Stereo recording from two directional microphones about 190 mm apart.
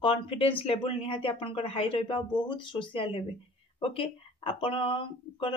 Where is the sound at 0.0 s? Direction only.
30° left (ahead or behind).